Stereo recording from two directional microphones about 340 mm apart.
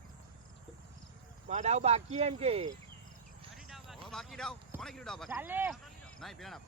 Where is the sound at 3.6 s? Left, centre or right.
Centre.